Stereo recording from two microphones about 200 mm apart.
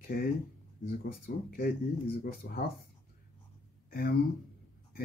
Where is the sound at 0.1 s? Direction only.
45° left (ahead or behind).